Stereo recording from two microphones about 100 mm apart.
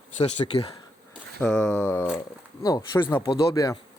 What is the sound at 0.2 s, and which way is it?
Speech, 75° left (ahead or behind).